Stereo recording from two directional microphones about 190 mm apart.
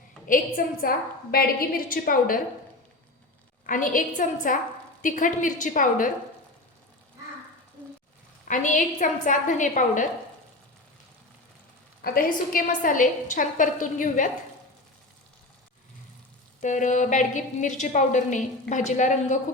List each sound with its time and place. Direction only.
0.3 s a woman's voice: 50° left (ahead or behind)
3.7 s a woman's voice: 45° left (ahead or behind)
8.4 s a woman's voice: 40° left (ahead or behind)
12.0 s a woman's voice: 50° left (ahead or behind)
16.6 s a woman's voice: 40° left (ahead or behind)